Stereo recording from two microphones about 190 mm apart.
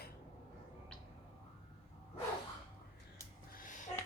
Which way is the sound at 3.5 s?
45° left (ahead or behind).